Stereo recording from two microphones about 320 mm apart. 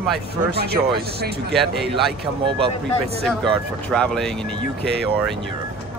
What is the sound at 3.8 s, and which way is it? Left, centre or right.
Speech, centre.